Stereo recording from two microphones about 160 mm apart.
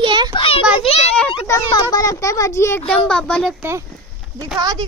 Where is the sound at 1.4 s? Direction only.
20° left (ahead or behind); by 3.6 s 5° left (ahead or behind).